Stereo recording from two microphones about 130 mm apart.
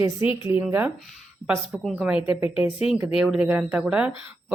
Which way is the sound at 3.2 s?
5° right (ahead or behind).